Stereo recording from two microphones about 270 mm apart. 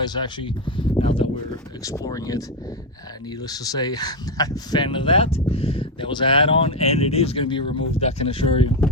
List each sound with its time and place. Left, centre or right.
0.0 s speech: centre
3.4 s speech: centre